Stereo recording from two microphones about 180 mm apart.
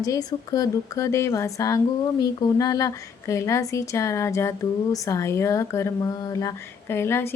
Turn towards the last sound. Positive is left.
turn(degrees=15)  # may be behind; listen again after turning